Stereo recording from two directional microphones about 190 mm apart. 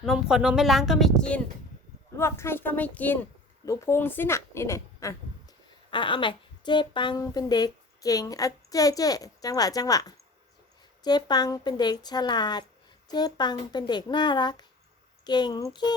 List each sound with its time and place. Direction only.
0.0 s speech: centre (ahead or behind)
2.1 s a woman's voice: 15° left (ahead or behind)